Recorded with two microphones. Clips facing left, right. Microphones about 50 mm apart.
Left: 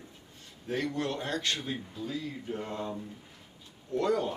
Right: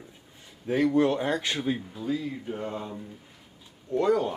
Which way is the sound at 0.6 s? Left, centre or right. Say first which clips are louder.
Right 9 dB; centre.